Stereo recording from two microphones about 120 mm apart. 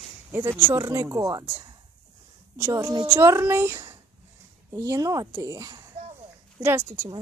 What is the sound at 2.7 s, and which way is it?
Speech, 35° right (ahead or behind).